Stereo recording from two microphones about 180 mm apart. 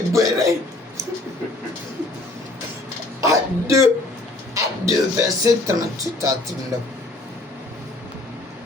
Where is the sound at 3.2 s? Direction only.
15° right (ahead or behind).